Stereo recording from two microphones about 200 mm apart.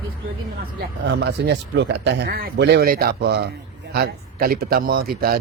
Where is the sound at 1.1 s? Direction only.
60° right (ahead or behind).